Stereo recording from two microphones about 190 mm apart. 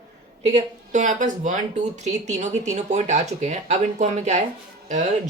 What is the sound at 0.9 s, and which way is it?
Speech, 40° right (ahead or behind).